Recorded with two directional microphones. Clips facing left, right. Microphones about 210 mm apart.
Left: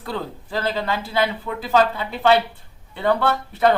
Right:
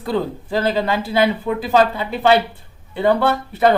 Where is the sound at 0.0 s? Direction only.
15° right (ahead or behind).